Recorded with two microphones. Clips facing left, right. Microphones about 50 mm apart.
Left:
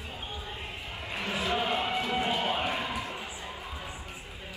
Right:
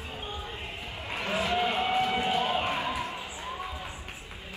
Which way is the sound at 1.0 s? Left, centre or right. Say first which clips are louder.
Right 3 dB; right.